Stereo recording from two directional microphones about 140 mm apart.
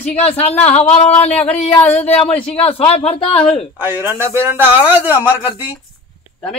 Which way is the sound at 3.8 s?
15° right (ahead or behind).